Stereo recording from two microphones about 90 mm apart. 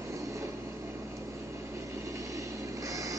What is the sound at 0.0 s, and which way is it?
Vehicle, 35° right (ahead or behind).